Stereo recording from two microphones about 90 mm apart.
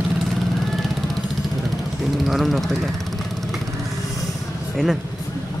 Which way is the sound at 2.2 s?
Centre (ahead or behind).